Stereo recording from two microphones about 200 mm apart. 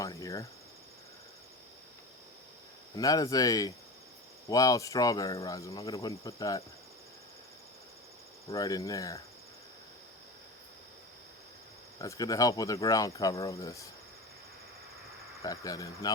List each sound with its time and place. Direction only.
0.0 s cricket: 15° left (ahead or behind)
2.9 s speech: 20° left (ahead or behind)
8.4 s speech: 15° left (ahead or behind)
11.9 s speech: 15° left (ahead or behind)
15.4 s speech: 15° left (ahead or behind)